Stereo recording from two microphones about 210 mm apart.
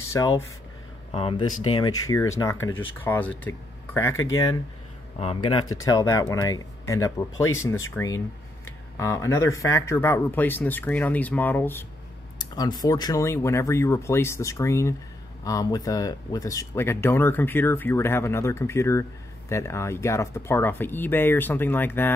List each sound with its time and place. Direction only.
0.0 s speech: 15° left (ahead or behind)
1.1 s speech: 25° left (ahead or behind)
5.9 s speech: 15° left (ahead or behind)